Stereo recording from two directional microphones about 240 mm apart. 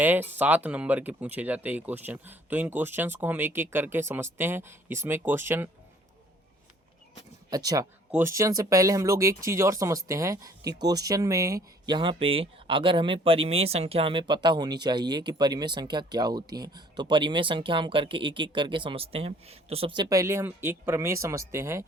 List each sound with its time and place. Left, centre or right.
0.0 s speech: centre
7.5 s speech: centre